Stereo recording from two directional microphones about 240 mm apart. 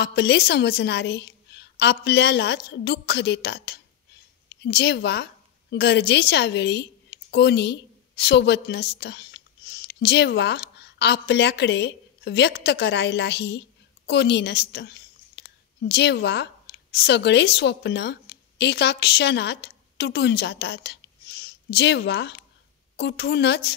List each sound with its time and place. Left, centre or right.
0.0 s a woman's voice: left